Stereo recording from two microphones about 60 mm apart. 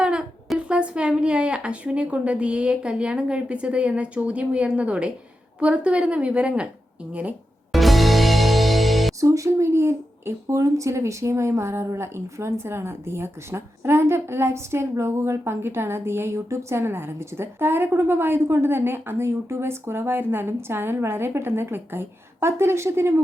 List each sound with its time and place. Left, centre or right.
0.0 s a sound: centre
0.7 s a woman's voice: centre
7.7 s music: centre
9.2 s speech: right